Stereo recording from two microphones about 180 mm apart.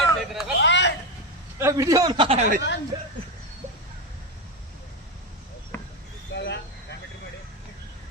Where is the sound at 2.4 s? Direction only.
45° right (ahead or behind).